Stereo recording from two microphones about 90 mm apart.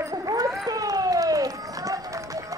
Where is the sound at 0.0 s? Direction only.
30° right (ahead or behind).